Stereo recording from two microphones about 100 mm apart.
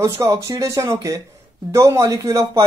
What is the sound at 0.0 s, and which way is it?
Speech, 30° right (ahead or behind).